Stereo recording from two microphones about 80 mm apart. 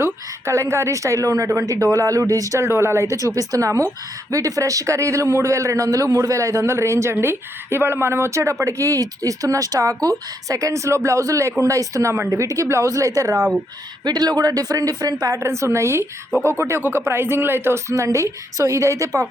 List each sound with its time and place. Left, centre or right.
0.0 s a man's voice: right
14.0 s a woman's voice: right
15.4 s a man's voice: right